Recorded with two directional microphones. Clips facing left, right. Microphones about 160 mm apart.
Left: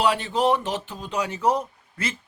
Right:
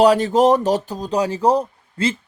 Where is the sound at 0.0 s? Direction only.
40° right (ahead or behind).